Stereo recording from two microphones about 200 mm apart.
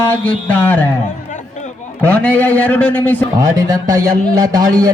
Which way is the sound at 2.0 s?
10° left (ahead or behind).